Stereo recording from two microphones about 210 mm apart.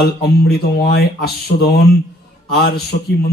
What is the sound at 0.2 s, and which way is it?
Speech, 50° left (ahead or behind).